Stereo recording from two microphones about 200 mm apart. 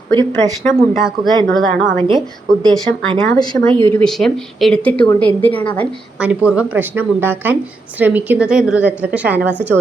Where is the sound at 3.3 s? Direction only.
20° left (ahead or behind).